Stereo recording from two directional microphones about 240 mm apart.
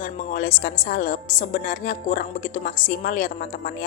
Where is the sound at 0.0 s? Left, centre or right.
Left.